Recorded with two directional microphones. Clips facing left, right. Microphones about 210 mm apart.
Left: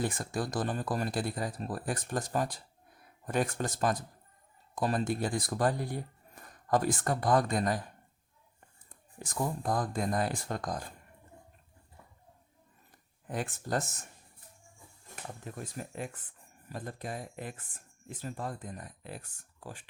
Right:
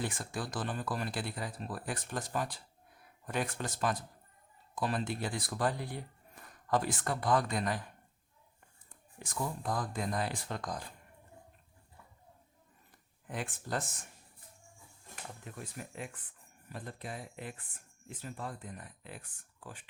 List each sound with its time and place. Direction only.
0.0 s speech: 45° left (ahead or behind)
9.1 s speech: 45° left (ahead or behind)
13.2 s speech: 40° left (ahead or behind)
15.5 s speech: 40° left (ahead or behind)